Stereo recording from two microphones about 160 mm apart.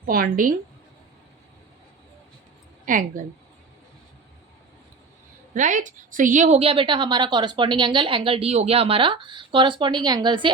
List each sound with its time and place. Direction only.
0.0 s a woman's voice: 65° right (ahead or behind)
2.8 s speech: 55° right (ahead or behind)
5.5 s a woman's voice: 50° right (ahead or behind); by 10.5 s 30° right (ahead or behind)